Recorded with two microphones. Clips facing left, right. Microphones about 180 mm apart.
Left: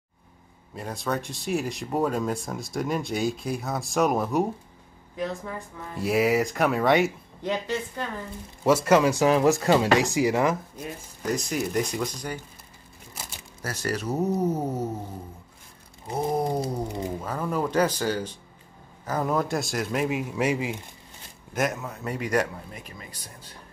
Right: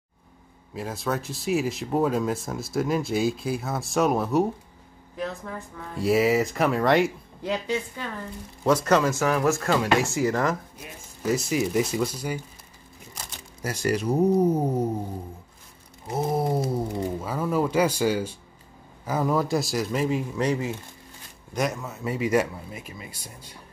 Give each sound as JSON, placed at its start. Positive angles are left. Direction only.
{"t": 0.7, "sound": "speech", "side_deg": 0}
{"t": 8.6, "sound": "speech", "side_deg": 10}
{"t": 11.2, "sound": "speech", "side_deg": -5}
{"t": 13.1, "sound": "typewriter", "side_deg": 10}
{"t": 13.6, "sound": "speech", "side_deg": -10}
{"t": 16.2, "sound": "speech", "side_deg": -5}
{"t": 21.5, "sound": "speech", "side_deg": 0}